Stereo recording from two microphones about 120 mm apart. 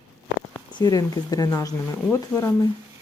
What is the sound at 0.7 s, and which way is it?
Speech, 35° left (ahead or behind).